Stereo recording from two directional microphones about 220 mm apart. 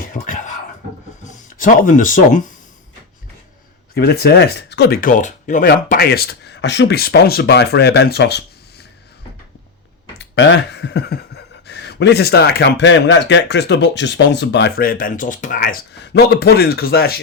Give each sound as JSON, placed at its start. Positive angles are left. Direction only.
{"t": 0.0, "sound": "a sound", "side_deg": 35}
{"t": 1.2, "sound": "speech", "side_deg": 35}
{"t": 3.9, "sound": "speech", "side_deg": 45}
{"t": 10.2, "sound": "speech", "side_deg": 55}